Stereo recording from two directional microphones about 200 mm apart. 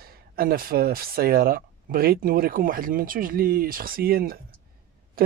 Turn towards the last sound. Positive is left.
turn(degrees=-50)  # may be behind; listen again after turning